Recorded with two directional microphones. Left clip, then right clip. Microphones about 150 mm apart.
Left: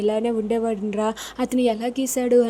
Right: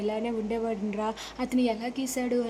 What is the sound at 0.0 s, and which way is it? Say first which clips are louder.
A woman's voice: left 8 dB; 30° left (ahead or behind).